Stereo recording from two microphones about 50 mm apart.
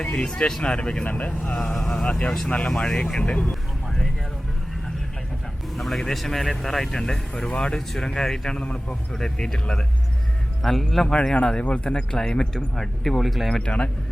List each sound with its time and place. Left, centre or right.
0.0 s speech: centre
1.5 s speech: centre
2.0 s speech: left
3.5 s vehicle: centre
5.7 s speech: centre
8.6 s speech: left
9.1 s speech: centre
11.7 s speech: left; by 13.6 s centre
13.6 s speech: left